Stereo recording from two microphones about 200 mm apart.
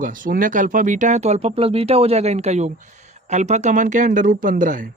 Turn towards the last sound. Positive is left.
turn(degrees=-40)  # may be behind; listen again after turning